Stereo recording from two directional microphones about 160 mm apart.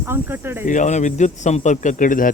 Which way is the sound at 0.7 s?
50° left (ahead or behind).